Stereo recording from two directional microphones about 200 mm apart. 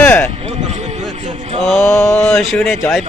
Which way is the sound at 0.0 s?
5° left (ahead or behind).